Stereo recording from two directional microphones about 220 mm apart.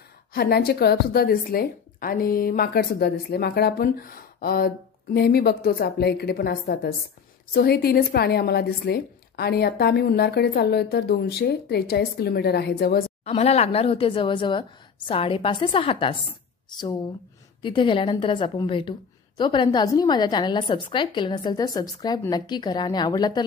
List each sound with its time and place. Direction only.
0.3 s a woman's voice: 45° left (ahead or behind)
13.2 s a woman's voice: 30° left (ahead or behind)
17.6 s a woman's voice: 20° left (ahead or behind)